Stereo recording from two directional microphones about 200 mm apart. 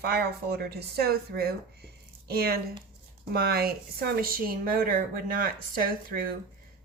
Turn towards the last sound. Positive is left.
turn(degrees=-45)  # may be behind; listen again after turning